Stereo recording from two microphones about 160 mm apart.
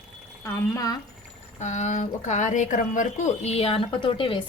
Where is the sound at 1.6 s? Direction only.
45° left (ahead or behind).